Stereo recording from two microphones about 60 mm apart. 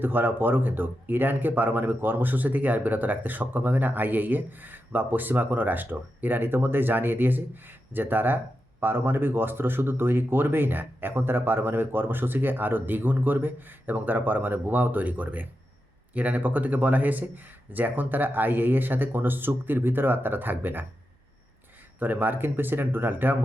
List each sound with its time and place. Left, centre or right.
0.0 s speech: right
21.9 s speech: right